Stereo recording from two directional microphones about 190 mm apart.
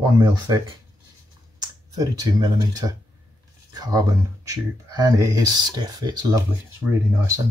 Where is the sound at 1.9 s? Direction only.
20° right (ahead or behind).